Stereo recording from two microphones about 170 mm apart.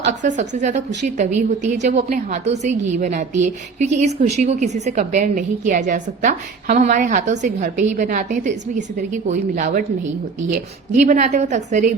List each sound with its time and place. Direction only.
0.2 s a woman's voice: 45° right (ahead or behind)
6.7 s a woman's voice: 65° right (ahead or behind)
6.9 s a woman's voice: 50° right (ahead or behind)